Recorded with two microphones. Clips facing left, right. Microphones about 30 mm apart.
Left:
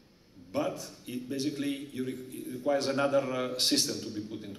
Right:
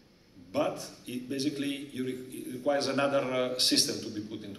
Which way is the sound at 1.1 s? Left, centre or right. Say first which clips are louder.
Even; right.